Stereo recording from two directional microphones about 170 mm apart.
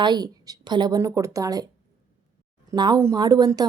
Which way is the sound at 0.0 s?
25° right (ahead or behind).